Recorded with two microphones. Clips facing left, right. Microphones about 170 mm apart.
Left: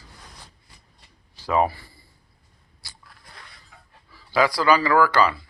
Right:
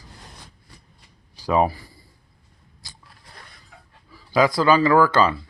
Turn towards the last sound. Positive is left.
turn(degrees=-25)  # may be behind; listen again after turning